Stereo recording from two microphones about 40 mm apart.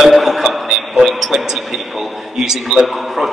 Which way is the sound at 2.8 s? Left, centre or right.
Centre.